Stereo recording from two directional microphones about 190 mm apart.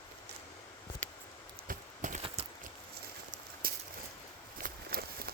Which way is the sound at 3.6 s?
50° right (ahead or behind).